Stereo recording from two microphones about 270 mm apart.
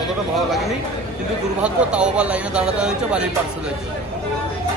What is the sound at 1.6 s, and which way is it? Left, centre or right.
Speech, centre.